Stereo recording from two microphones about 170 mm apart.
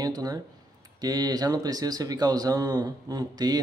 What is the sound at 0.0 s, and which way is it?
Speech, 20° right (ahead or behind).